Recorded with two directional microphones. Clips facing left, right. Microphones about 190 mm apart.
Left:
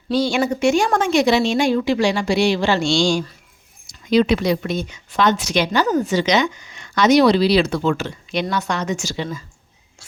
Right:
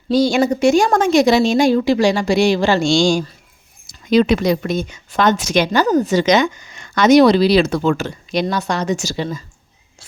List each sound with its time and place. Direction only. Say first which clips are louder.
0.1 s a woman's voice: right 4 dB; 40° right (ahead or behind)